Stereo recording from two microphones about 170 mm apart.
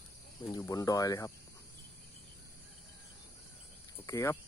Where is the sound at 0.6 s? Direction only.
20° left (ahead or behind).